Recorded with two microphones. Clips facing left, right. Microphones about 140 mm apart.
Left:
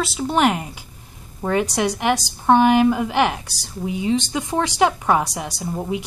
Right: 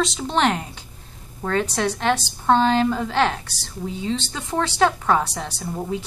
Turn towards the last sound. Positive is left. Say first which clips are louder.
# left 2 dB
turn(degrees=10)  # may be behind; listen again after turning